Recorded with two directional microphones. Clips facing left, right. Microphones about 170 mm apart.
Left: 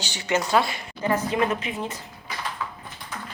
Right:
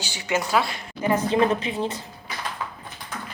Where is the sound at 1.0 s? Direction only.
15° right (ahead or behind).